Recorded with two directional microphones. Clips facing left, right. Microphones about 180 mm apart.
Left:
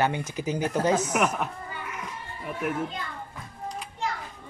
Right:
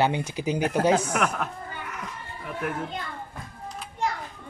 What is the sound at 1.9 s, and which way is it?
Children playing, 5° left (ahead or behind).